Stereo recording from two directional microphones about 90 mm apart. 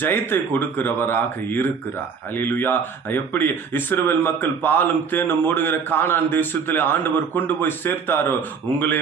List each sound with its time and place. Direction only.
0.0 s speech: 20° left (ahead or behind)